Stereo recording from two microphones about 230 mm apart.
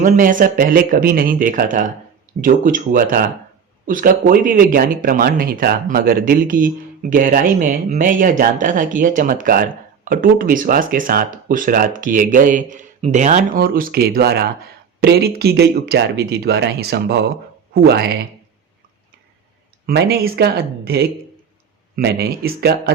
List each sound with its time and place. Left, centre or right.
0.0 s speech: right
19.9 s speech: right